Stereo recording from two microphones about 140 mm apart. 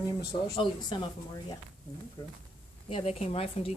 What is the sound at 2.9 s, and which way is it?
Speech, 50° left (ahead or behind).